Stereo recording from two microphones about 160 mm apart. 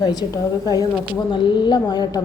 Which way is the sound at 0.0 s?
25° left (ahead or behind).